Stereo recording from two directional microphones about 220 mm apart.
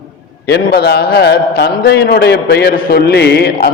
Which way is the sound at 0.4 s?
45° left (ahead or behind).